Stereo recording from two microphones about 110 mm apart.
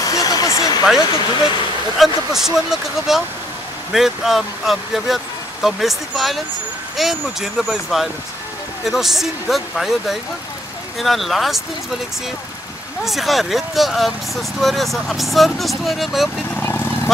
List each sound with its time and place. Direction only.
0.0 s a sound: 35° left (ahead or behind)
1.0 s speech: 40° left (ahead or behind)
2.0 s speech: 5° right (ahead or behind)
13.0 s speech: centre (ahead or behind)
16.6 s vehicle: 20° left (ahead or behind)